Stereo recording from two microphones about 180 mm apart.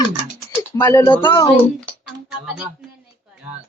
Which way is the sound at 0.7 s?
15° left (ahead or behind).